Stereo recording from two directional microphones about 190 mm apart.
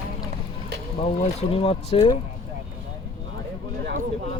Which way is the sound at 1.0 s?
30° left (ahead or behind).